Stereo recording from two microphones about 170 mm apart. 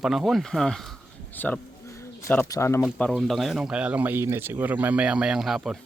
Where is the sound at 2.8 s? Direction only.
Centre (ahead or behind).